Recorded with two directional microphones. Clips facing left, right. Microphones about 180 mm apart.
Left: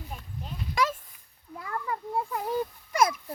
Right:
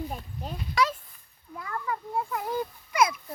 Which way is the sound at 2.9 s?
45° left (ahead or behind).